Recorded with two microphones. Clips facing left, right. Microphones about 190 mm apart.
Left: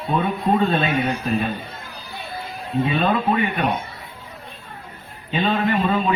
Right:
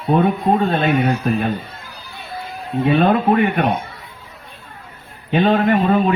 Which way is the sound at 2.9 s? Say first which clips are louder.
Right 8 dB; 55° right (ahead or behind).